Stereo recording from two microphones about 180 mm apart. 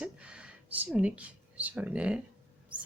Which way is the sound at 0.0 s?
5° right (ahead or behind).